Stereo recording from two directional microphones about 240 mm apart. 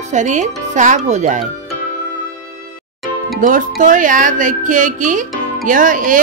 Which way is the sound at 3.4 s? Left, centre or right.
Right.